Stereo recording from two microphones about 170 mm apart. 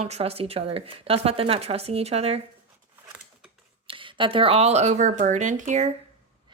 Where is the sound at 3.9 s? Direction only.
30° right (ahead or behind).